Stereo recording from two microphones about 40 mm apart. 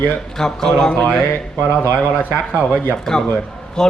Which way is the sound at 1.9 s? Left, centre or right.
Right.